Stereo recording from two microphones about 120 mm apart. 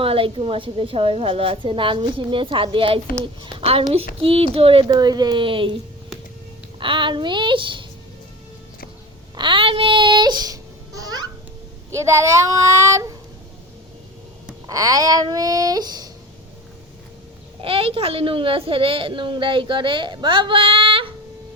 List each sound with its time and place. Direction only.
0.0 s a woman's voice: 50° right (ahead or behind)
4.9 s speech: 35° right (ahead or behind)
6.7 s a woman's voice: 45° right (ahead or behind)
9.3 s babbling: 40° right (ahead or behind)
11.9 s speech: 25° right (ahead or behind)
14.7 s speech: 30° right (ahead or behind)
17.6 s a woman's voice: 50° right (ahead or behind)